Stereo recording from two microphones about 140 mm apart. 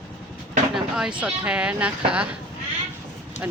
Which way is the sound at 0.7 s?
5° right (ahead or behind).